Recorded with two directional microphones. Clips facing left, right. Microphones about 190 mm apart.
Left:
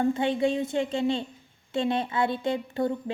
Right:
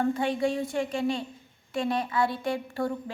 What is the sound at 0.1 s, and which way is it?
A woman's voice, 25° left (ahead or behind).